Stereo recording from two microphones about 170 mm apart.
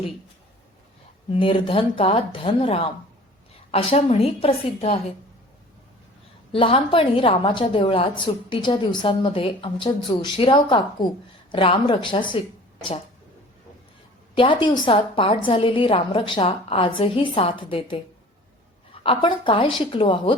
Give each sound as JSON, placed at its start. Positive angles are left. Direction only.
{"t": 1.3, "sound": "a woman's voice", "side_deg": 30}
{"t": 6.5, "sound": "a woman's voice", "side_deg": 30}
{"t": 14.3, "sound": "a woman's voice", "side_deg": 30}
{"t": 19.0, "sound": "a woman's voice", "side_deg": 30}